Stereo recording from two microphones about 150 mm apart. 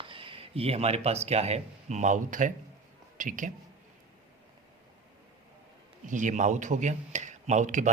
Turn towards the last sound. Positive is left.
turn(degrees=-55)  # may be behind; listen again after turning